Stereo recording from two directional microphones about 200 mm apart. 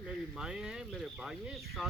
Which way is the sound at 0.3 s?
5° right (ahead or behind).